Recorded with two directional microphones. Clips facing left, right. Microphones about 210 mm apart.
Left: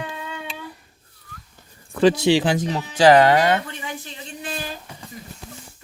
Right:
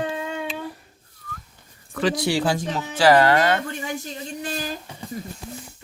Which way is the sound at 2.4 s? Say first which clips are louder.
Left 2 dB; 20° left (ahead or behind).